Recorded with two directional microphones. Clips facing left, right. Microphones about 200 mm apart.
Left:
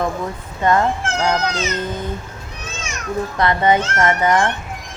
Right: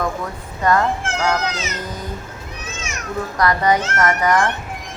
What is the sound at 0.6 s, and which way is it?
A woman's voice, 25° left (ahead or behind).